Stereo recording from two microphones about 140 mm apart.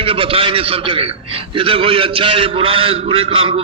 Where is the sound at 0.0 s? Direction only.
40° right (ahead or behind).